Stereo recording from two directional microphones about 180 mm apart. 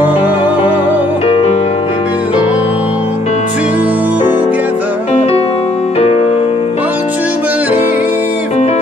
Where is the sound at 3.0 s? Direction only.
40° left (ahead or behind).